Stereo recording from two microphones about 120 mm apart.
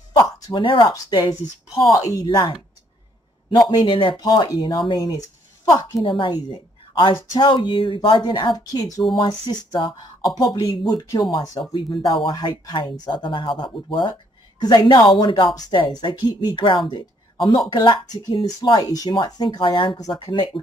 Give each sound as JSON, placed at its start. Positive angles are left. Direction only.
{"t": 0.5, "sound": "speech", "side_deg": 45}
{"t": 4.2, "sound": "a woman's voice", "side_deg": 35}